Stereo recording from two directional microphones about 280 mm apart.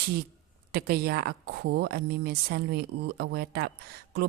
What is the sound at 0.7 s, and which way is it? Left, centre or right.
Speech, right.